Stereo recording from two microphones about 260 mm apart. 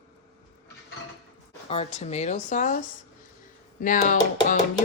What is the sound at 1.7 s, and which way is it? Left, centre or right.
Speech, left.